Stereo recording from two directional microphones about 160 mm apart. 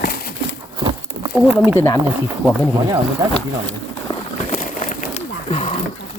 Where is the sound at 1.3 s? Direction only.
10° right (ahead or behind).